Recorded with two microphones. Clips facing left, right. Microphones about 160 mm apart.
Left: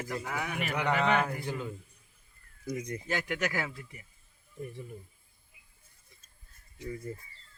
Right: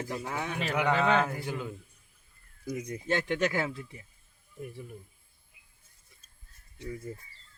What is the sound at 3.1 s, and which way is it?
Speech, 25° right (ahead or behind).